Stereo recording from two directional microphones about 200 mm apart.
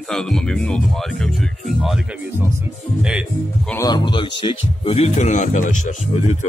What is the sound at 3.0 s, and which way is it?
Speech, 5° right (ahead or behind).